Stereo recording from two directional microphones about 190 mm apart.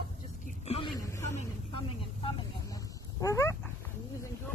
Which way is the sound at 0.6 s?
30° left (ahead or behind).